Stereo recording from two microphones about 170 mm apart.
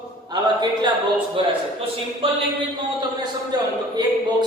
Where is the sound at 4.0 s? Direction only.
25° right (ahead or behind).